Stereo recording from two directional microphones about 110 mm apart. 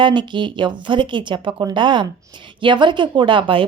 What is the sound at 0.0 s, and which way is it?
A woman's voice, 45° right (ahead or behind).